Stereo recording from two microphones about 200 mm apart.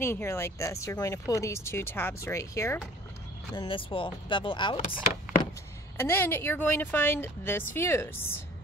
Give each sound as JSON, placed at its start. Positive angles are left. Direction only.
{"t": 0.0, "sound": "speech", "side_deg": 10}
{"t": 3.5, "sound": "speech", "side_deg": 25}
{"t": 5.9, "sound": "speech", "side_deg": 10}